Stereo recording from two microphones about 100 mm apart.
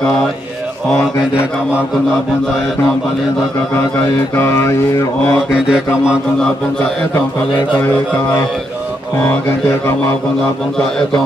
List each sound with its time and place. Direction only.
4.4 s mantra: 25° left (ahead or behind)
5.5 s mantra: 5° right (ahead or behind)